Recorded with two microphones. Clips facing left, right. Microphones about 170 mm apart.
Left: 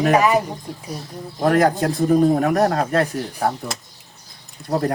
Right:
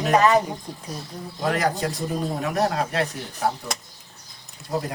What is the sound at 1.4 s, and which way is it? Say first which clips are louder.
A man's voice: left 7 dB; 55° left (ahead or behind).